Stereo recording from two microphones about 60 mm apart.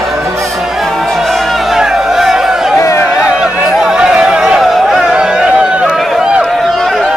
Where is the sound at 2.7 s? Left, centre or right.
Left.